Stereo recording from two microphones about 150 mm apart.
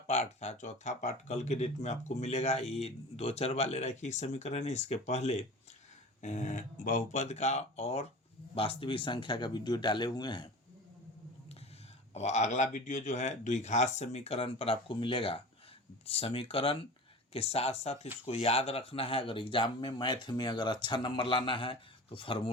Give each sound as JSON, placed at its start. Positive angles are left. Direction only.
{"t": 0.1, "sound": "speech", "side_deg": 50}
{"t": 12.1, "sound": "speech", "side_deg": 50}